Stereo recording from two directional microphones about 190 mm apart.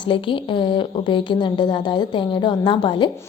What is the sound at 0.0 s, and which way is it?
Speech, 25° left (ahead or behind).